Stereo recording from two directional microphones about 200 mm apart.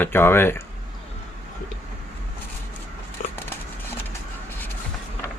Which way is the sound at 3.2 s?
40° left (ahead or behind).